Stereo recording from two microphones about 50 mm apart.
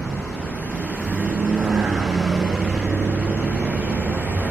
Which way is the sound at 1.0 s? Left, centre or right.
Right.